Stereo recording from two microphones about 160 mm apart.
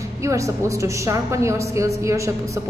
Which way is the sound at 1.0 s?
20° right (ahead or behind).